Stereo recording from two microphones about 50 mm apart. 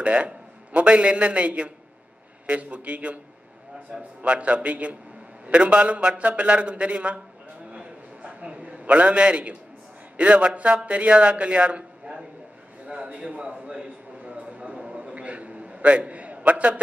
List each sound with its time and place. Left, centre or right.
0.0 s a man's voice: right
4.2 s a man's voice: right
7.7 s a sound: right
9.2 s a man's voice: centre
12.8 s a sound: right
16.1 s a man's voice: right